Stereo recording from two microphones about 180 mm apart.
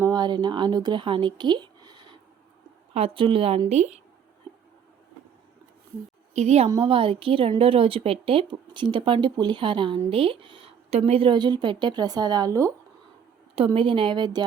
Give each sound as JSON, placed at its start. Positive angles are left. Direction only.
{"t": 0.0, "sound": "a woman's voice", "side_deg": -25}
{"t": 6.3, "sound": "a woman's voice", "side_deg": -40}
{"t": 13.7, "sound": "a woman's voice", "side_deg": -30}